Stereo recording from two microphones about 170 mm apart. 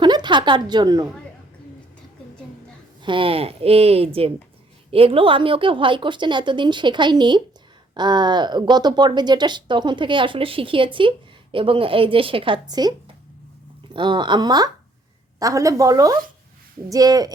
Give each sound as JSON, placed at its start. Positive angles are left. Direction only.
{"t": 0.0, "sound": "a woman's voice", "side_deg": -25}
{"t": 3.0, "sound": "a woman's voice", "side_deg": -30}
{"t": 13.9, "sound": "speech", "side_deg": -25}